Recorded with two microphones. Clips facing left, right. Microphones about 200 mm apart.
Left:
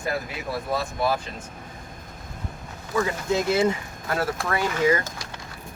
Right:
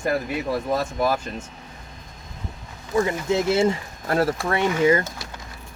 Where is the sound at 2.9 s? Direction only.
25° right (ahead or behind).